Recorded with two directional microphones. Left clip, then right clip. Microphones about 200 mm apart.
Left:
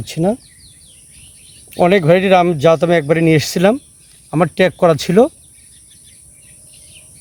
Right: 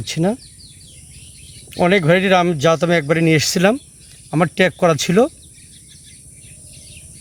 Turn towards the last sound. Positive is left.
turn(degrees=10)  # may be behind; listen again after turning